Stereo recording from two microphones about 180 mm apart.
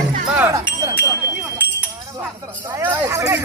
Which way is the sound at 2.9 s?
15° right (ahead or behind).